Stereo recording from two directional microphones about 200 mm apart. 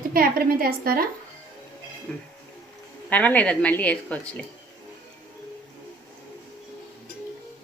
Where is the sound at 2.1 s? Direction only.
5° left (ahead or behind).